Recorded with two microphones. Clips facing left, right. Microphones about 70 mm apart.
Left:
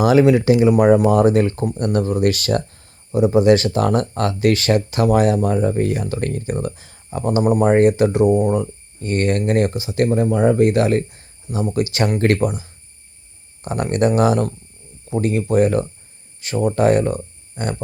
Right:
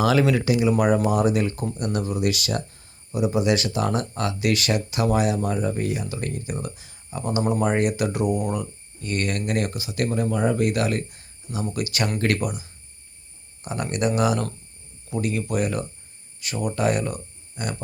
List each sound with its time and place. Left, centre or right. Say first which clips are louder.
0.0 s speech: left 7 dB; left
1.0 s speech: left 7 dB; left